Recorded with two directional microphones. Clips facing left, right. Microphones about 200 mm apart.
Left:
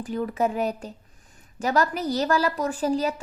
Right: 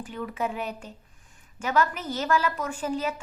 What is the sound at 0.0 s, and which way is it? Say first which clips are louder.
A woman's voice: left 6 dB; 40° left (ahead or behind).